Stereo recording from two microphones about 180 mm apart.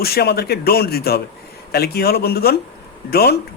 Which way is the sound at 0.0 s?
60° left (ahead or behind).